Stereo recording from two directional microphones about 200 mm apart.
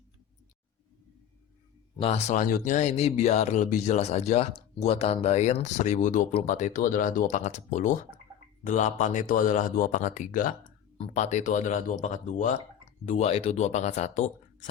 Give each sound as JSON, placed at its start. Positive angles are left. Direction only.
{"t": 2.0, "sound": "speech", "side_deg": 30}